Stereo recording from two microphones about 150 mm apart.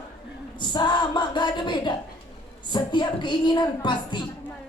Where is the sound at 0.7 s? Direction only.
30° left (ahead or behind).